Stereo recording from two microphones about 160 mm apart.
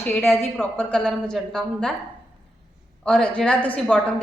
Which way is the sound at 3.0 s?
5° left (ahead or behind).